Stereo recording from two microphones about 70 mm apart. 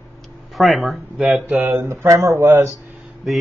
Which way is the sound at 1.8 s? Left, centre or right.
Right.